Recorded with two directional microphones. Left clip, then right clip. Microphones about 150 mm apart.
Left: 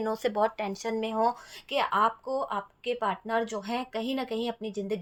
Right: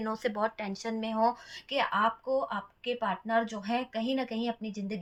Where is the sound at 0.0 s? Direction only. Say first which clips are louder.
Left 4 dB; 35° left (ahead or behind).